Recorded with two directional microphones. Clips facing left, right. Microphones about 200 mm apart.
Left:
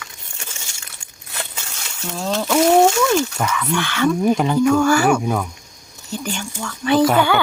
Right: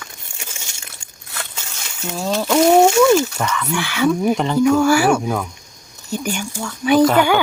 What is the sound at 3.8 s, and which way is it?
Speech, 10° right (ahead or behind).